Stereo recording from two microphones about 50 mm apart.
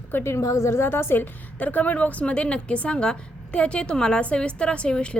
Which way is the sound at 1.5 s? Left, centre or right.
Left.